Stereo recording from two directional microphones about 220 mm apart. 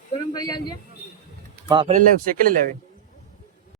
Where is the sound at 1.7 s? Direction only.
20° right (ahead or behind).